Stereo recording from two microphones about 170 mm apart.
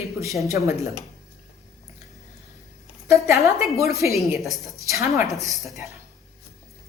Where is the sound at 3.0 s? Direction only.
15° right (ahead or behind).